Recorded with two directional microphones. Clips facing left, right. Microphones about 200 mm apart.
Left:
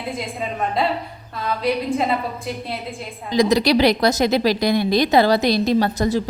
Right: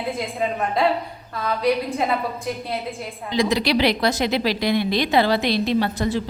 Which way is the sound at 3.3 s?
40° left (ahead or behind).